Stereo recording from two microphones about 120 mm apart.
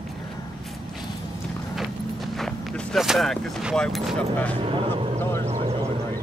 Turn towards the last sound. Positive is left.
turn(degrees=20)  # may be behind; listen again after turning